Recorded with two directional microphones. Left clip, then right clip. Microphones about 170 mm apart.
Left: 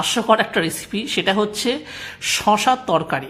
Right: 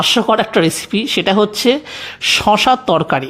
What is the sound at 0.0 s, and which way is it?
Speech, 40° right (ahead or behind).